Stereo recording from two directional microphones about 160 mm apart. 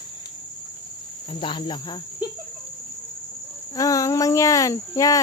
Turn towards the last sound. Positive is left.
turn(degrees=20)  # may be behind; listen again after turning